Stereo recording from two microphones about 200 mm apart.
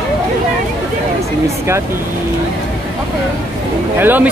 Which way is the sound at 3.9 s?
10° right (ahead or behind).